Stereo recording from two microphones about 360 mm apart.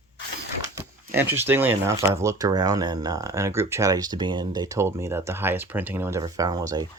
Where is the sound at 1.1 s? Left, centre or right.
Centre.